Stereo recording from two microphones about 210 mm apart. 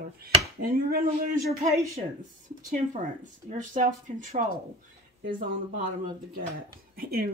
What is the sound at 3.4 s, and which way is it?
Speech, 35° right (ahead or behind).